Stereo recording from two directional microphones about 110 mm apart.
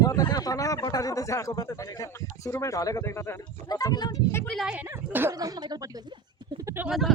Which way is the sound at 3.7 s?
35° left (ahead or behind).